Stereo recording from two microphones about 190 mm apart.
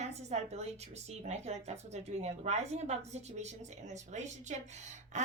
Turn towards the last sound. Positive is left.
turn(degrees=-40)  # may be behind; listen again after turning